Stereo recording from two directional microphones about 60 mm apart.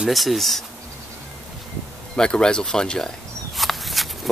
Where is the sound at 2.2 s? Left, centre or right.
Centre.